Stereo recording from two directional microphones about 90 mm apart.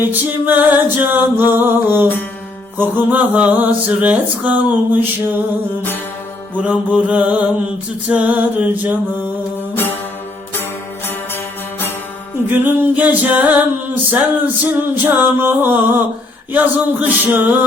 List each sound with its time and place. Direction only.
0.0 s music: 20° right (ahead or behind)
2.7 s mantra: 20° right (ahead or behind)
6.6 s mantra: 15° right (ahead or behind)
8.1 s music: 15° right (ahead or behind)
9.7 s music: 20° left (ahead or behind)
12.5 s music: 20° right (ahead or behind)